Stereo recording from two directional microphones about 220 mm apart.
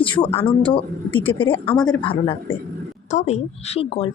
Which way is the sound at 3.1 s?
30° left (ahead or behind).